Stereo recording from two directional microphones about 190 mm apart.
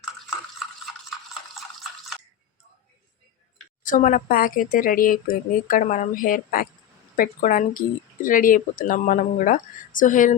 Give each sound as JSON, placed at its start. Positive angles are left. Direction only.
{"t": 1.3, "sound": "drip", "side_deg": 0}
{"t": 3.8, "sound": "speech", "side_deg": 45}